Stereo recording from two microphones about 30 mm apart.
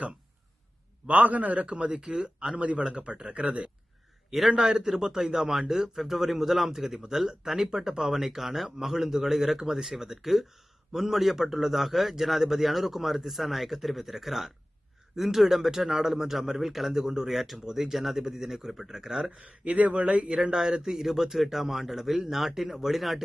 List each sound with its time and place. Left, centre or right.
1.0 s a man's voice: right
1.6 s speech: right
2.0 s speech: right
2.6 s speech: right
2.8 s speech: right
3.3 s speech: right
4.3 s speech: centre
4.7 s a man's voice: right; by 16.9 s centre
16.9 s speech: centre
19.4 s speech: right
20.2 s speech: right
21.0 s speech: centre